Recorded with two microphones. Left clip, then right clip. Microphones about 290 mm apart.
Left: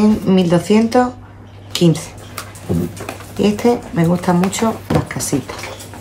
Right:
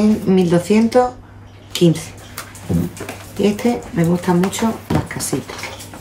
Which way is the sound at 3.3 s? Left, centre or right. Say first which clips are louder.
Left 3 dB; centre.